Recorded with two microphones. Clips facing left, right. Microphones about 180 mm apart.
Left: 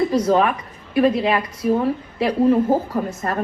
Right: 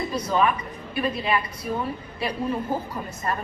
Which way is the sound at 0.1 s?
90° left.